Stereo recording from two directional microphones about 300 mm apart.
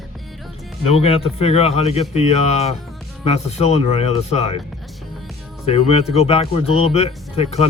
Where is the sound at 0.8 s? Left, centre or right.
Centre.